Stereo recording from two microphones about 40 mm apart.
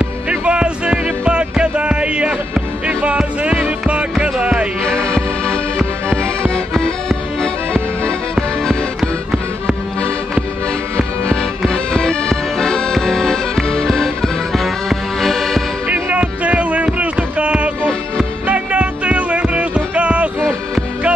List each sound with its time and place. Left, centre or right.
0.0 s music: right
4.8 s music: left
8.4 s music: centre
11.6 s accordion: centre
15.9 s music: right